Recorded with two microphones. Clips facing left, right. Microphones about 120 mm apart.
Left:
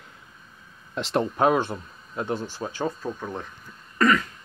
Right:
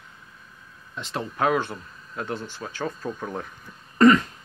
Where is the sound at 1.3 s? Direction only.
25° left (ahead or behind).